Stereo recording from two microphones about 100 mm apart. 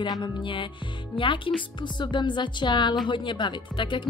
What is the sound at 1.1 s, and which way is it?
Speech, 60° left (ahead or behind).